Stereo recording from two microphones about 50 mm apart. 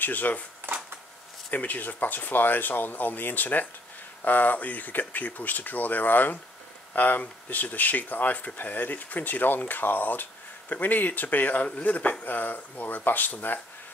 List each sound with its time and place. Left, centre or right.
0.0 s speech: left
1.5 s speech: left